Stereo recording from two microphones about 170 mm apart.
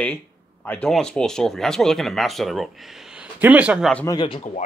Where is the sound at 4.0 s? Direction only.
25° left (ahead or behind).